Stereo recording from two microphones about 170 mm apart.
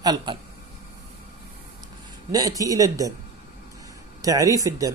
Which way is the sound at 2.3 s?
20° right (ahead or behind).